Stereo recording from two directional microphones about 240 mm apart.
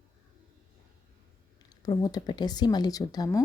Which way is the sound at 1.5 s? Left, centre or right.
Centre.